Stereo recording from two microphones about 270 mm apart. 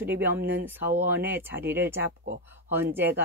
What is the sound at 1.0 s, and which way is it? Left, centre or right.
Speech, centre.